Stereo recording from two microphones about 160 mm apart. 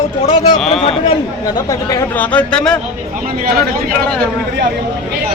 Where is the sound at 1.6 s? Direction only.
20° left (ahead or behind).